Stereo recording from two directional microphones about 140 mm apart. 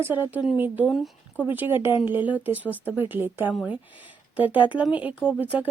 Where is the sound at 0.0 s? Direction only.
15° right (ahead or behind).